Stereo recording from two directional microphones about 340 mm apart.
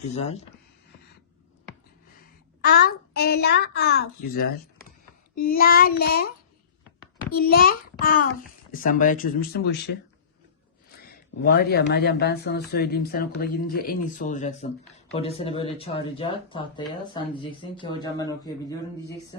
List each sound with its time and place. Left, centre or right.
0.2 s speech: centre
2.6 s speech: left
5.3 s child singing: left
5.5 s speech: left
11.4 s speech: left; by 18.5 s centre